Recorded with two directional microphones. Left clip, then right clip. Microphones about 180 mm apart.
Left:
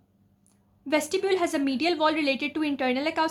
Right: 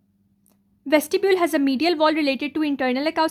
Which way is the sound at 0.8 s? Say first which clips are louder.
Right 6 dB; 35° right (ahead or behind).